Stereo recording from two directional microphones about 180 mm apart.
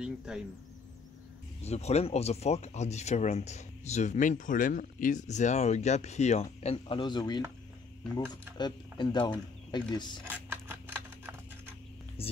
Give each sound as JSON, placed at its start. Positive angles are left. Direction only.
{"t": 0.0, "sound": "speech", "side_deg": -5}
{"t": 1.6, "sound": "speech", "side_deg": 35}
{"t": 8.5, "sound": "speech", "side_deg": 25}
{"t": 10.2, "sound": "a sound", "side_deg": -10}
{"t": 12.2, "sound": "speech", "side_deg": 35}